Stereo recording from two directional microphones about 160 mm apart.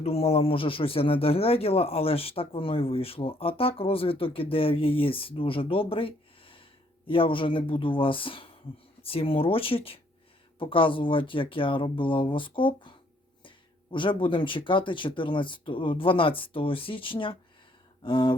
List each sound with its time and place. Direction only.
0.0 s speech: 40° left (ahead or behind)
13.9 s speech: 30° left (ahead or behind)